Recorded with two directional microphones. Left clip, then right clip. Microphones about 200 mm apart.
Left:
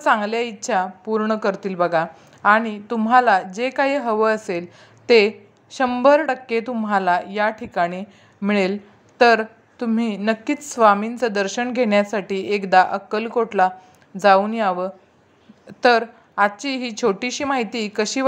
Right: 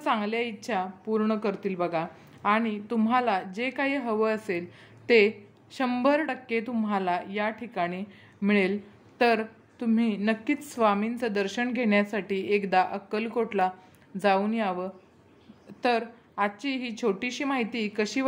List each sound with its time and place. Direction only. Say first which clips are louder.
0.0 s a woman's voice: left 9 dB; 15° left (ahead or behind)